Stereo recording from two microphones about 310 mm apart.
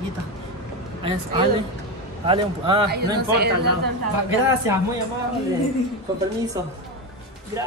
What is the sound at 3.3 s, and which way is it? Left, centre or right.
Speech, right.